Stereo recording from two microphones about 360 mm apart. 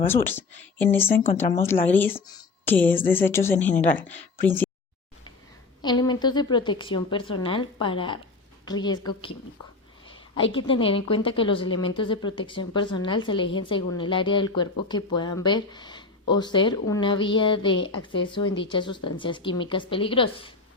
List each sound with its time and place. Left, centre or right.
0.1 s a woman's voice: centre
5.8 s a woman's voice: centre
10.5 s a woman's voice: centre